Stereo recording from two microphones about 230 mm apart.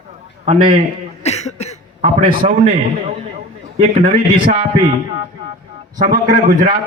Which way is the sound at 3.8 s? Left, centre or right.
Right.